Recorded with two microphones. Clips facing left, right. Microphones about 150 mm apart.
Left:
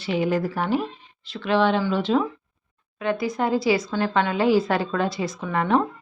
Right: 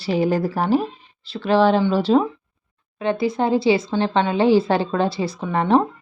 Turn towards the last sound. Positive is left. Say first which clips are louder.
# right 4 dB
turn(degrees=-30)  # may be behind; listen again after turning